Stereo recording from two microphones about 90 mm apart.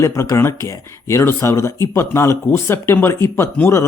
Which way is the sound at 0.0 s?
30° left (ahead or behind).